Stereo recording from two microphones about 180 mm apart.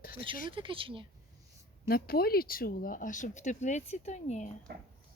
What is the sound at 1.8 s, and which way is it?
Speech, 55° left (ahead or behind).